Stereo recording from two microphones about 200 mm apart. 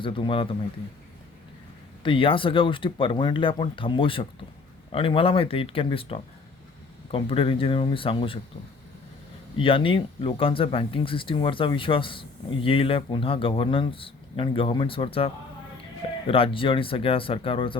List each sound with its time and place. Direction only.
0.0 s speech: 25° left (ahead or behind)
2.0 s speech: 25° left (ahead or behind)
9.6 s speech: 25° left (ahead or behind)